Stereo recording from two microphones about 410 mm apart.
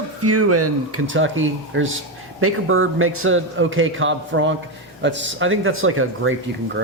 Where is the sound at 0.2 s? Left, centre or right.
Right.